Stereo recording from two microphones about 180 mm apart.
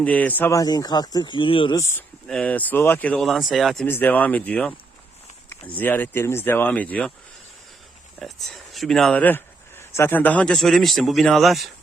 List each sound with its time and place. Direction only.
0.0 s speech: 10° left (ahead or behind); by 1.8 s 30° left (ahead or behind)
1.8 s speech: 10° left (ahead or behind)
3.8 s speech: 10° left (ahead or behind)
8.2 s speech: centre (ahead or behind)